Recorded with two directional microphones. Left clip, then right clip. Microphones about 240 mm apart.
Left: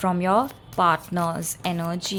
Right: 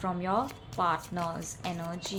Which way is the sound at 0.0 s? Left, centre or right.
Left.